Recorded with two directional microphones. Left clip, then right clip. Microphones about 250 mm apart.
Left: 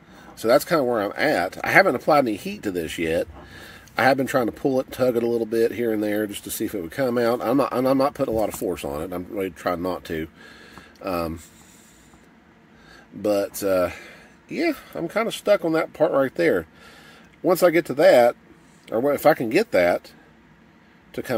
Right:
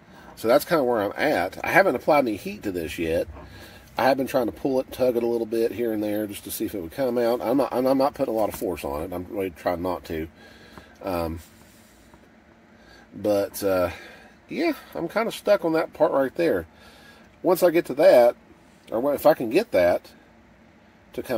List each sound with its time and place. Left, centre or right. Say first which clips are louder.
0.3 s speech: left 1 dB; centre
13.2 s speech: left 1 dB; centre
21.1 s speech: left 2 dB; left